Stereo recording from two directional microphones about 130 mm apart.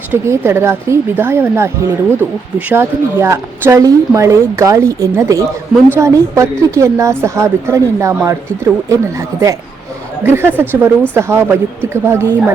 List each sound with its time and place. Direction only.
0.1 s a woman's voice: 20° right (ahead or behind)
10.2 s a woman's voice: 20° right (ahead or behind)